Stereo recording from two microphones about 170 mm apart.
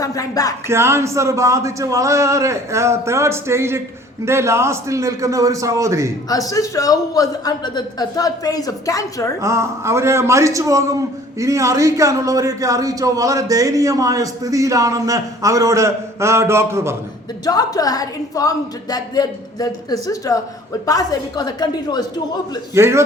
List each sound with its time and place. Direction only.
0.0 s a man's voice: 20° left (ahead or behind)
0.7 s a man's voice: 15° right (ahead or behind)
6.2 s a man's voice: 20° left (ahead or behind)
9.4 s a man's voice: 15° right (ahead or behind)
17.4 s a man's voice: 20° left (ahead or behind)
22.7 s a man's voice: 15° right (ahead or behind)